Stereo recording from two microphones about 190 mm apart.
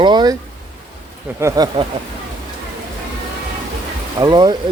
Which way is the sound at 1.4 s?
20° right (ahead or behind).